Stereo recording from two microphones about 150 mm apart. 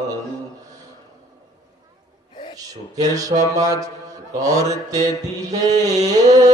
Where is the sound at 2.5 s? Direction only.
25° right (ahead or behind).